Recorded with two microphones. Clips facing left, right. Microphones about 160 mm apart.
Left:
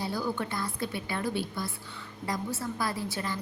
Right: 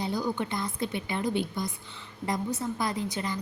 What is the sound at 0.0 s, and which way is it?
A woman's voice, 20° right (ahead or behind).